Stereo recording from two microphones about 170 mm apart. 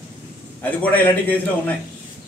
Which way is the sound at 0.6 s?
10° left (ahead or behind).